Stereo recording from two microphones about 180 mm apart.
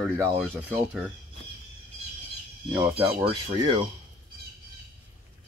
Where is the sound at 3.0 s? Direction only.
30° right (ahead or behind).